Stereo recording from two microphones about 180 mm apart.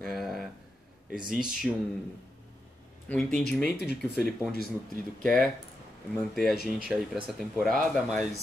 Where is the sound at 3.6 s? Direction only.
60° left (ahead or behind).